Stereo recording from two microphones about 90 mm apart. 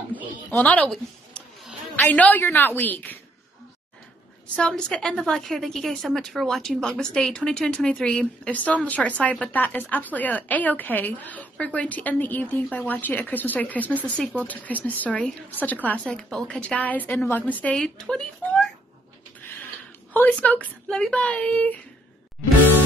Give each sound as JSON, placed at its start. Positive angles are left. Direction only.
{"t": 0.1, "sound": "a sound", "side_deg": 15}
{"t": 2.0, "sound": "speech", "side_deg": 20}
{"t": 4.6, "sound": "a woman's voice", "side_deg": 10}
{"t": 20.1, "sound": "a woman's voice", "side_deg": 20}